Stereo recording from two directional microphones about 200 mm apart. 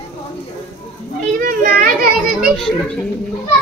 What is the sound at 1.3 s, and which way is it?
Speech, 45° right (ahead or behind).